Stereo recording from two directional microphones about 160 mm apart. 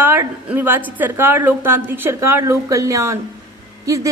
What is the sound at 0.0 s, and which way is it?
A woman's voice, 15° right (ahead or behind).